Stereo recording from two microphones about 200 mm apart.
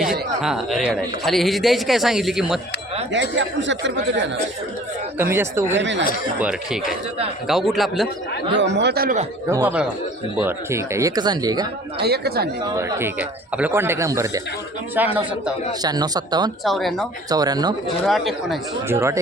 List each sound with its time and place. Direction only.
0.4 s a man's voice: centre (ahead or behind)
3.1 s speech: 65° right (ahead or behind)
5.1 s speech: 10° right (ahead or behind)
5.8 s speech: 65° right (ahead or behind)
6.4 s a man's voice: 5° right (ahead or behind)
8.5 s speech: 60° right (ahead or behind)
9.5 s speech: 10° right (ahead or behind)
12.0 s speech: 50° right (ahead or behind)
12.6 s speech: 15° right (ahead or behind)
15.8 s speech: 20° right (ahead or behind)
16.6 s a man's voice: centre (ahead or behind)
17.2 s speech: 20° right (ahead or behind)
17.8 s a man's voice: centre (ahead or behind)
18.9 s speech: 15° right (ahead or behind)